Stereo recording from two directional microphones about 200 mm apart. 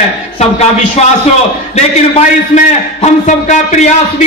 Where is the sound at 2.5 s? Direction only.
40° left (ahead or behind).